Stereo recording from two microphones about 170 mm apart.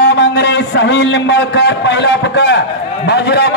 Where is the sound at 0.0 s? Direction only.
90° left.